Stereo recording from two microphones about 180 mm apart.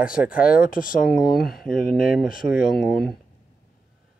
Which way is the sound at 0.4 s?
50° left (ahead or behind).